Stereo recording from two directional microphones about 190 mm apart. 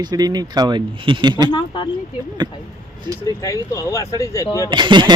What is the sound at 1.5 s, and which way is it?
Speech, 25° left (ahead or behind).